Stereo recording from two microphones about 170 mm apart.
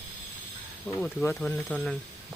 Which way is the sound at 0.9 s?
15° left (ahead or behind).